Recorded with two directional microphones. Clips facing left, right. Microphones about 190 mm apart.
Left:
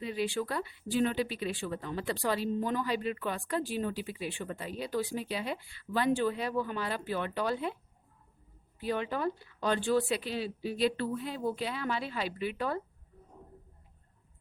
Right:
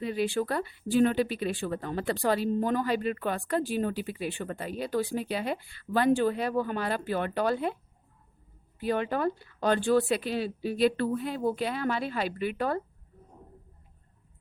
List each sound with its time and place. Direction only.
0.0 s speech: 50° right (ahead or behind)
8.8 s speech: 55° right (ahead or behind)